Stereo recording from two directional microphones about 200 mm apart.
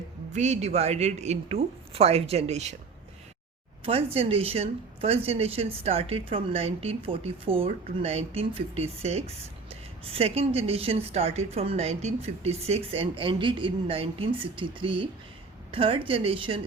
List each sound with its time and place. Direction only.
0.3 s speech: 35° right (ahead or behind)
3.8 s speech: 30° right (ahead or behind)